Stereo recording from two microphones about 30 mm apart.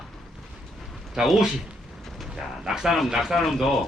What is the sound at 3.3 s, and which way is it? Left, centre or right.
Speech, centre.